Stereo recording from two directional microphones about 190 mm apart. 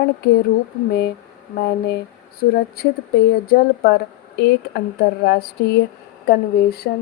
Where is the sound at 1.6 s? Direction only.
60° left (ahead or behind).